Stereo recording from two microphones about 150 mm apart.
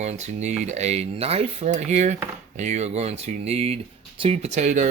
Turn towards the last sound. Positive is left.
turn(degrees=-55)  # may be behind; listen again after turning